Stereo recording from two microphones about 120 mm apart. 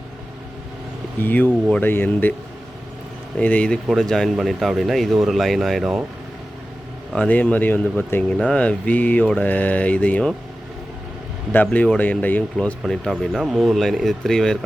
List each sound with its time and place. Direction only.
1.2 s speech: 15° left (ahead or behind)
3.3 s speech: 10° left (ahead or behind)
7.2 s speech: 10° left (ahead or behind)
11.5 s speech: 15° left (ahead or behind)